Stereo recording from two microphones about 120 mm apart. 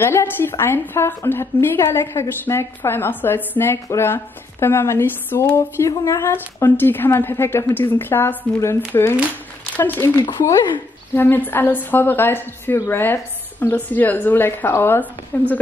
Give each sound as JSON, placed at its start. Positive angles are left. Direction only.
{"t": 0.0, "sound": "a woman's voice", "side_deg": 20}